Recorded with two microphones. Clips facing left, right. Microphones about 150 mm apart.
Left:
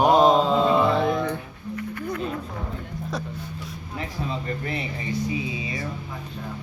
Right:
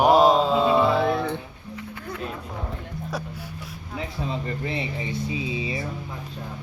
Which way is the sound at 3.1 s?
10° right (ahead or behind).